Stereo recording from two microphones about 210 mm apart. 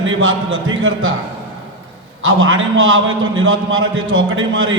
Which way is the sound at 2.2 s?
70° right (ahead or behind).